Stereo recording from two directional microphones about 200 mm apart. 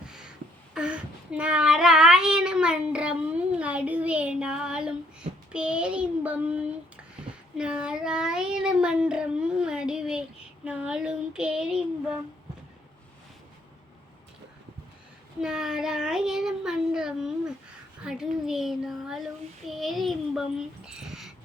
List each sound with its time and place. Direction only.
0.0 s speech: 5° right (ahead or behind)
15.4 s child singing: 5° right (ahead or behind)